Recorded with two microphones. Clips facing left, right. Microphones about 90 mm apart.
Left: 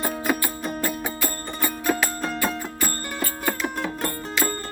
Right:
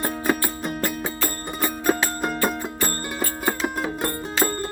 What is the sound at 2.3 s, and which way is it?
Music, 5° right (ahead or behind).